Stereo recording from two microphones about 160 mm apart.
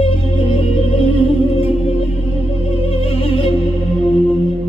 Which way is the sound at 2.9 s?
35° left (ahead or behind).